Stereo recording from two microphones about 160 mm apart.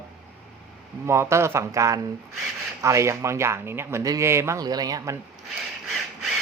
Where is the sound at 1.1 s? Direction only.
15° right (ahead or behind).